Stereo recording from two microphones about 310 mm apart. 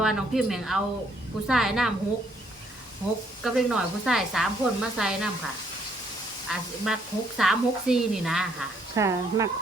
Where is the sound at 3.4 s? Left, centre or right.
Centre.